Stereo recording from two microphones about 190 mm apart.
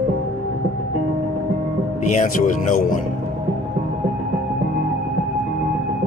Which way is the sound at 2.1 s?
40° left (ahead or behind).